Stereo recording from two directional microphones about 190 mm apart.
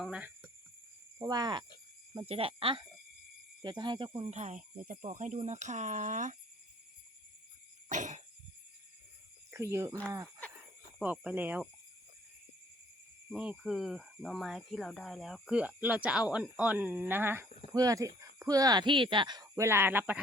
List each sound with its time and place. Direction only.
0.0 s speech: 5° right (ahead or behind)
1.2 s speech: 20° right (ahead or behind); by 6.3 s 40° right (ahead or behind)
7.9 s frog: 40° right (ahead or behind)
9.5 s speech: 15° right (ahead or behind)
11.0 s speech: 5° right (ahead or behind)
13.3 s speech: 5° right (ahead or behind)